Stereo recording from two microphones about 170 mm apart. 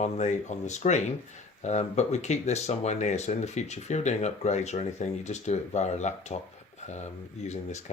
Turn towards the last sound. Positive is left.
turn(degrees=40)  # may be behind; listen again after turning